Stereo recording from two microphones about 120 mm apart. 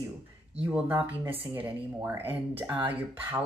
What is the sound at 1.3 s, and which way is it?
Speech, 15° right (ahead or behind).